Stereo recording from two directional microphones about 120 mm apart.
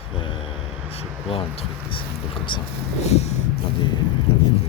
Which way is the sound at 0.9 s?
50° left (ahead or behind).